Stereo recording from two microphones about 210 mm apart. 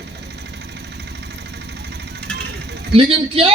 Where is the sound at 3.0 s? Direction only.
25° right (ahead or behind).